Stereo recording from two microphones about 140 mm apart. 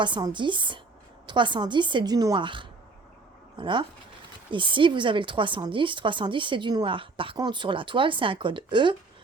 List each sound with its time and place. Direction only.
0.0 s a woman's voice: 35° right (ahead or behind)